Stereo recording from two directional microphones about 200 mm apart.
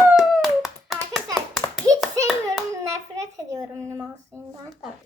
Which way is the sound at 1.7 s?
Centre (ahead or behind).